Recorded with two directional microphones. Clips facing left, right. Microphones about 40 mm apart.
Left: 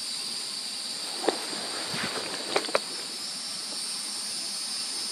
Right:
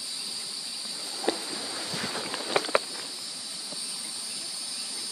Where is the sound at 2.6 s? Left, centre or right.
Right.